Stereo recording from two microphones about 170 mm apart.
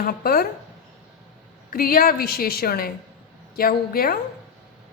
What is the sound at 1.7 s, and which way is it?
A woman's voice, 60° left (ahead or behind).